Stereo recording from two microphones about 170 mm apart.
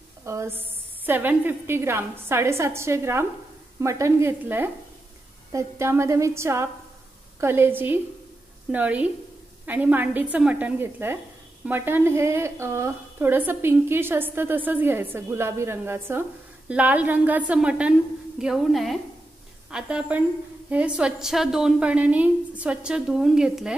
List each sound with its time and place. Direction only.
0.2 s a woman's voice: 15° right (ahead or behind)